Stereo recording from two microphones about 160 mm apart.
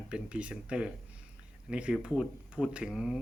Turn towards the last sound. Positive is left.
turn(degrees=-5)  # may be behind; listen again after turning